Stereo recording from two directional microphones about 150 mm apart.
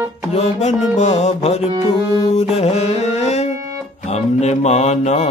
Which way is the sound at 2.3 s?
45° left (ahead or behind).